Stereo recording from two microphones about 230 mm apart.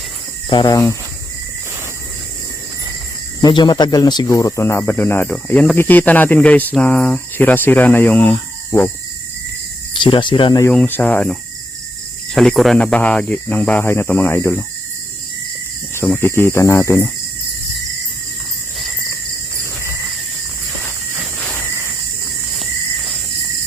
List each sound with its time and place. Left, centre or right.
0.5 s speech: centre
3.4 s speech: centre
9.9 s speech: left
16.0 s speech: centre
21.4 s cricket: centre